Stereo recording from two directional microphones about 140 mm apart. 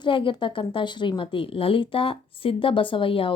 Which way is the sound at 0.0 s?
35° left (ahead or behind).